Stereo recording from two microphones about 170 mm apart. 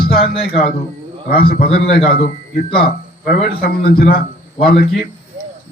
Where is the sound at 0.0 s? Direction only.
65° left (ahead or behind).